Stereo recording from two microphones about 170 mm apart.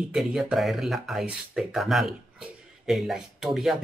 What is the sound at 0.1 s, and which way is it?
Speech, centre (ahead or behind).